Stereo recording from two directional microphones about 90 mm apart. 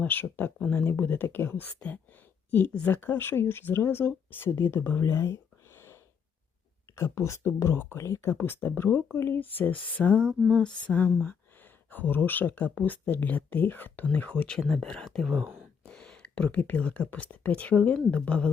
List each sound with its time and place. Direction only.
0.0 s speech: 20° left (ahead or behind)
10.5 s female singing: 10° left (ahead or behind)
11.9 s speech: 20° left (ahead or behind)
14.1 s female singing: 15° left (ahead or behind)
14.7 s speech: 5° left (ahead or behind)
18.1 s female singing: 15° left (ahead or behind)